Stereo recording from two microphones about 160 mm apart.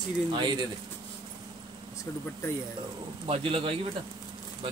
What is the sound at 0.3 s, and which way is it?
Speech, 30° right (ahead or behind).